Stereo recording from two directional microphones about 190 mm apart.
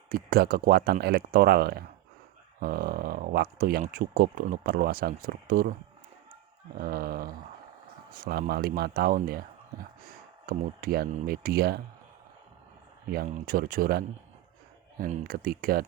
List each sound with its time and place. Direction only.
0.1 s speech: 50° right (ahead or behind)
6.7 s speech: 50° right (ahead or behind)
13.1 s speech: 45° right (ahead or behind)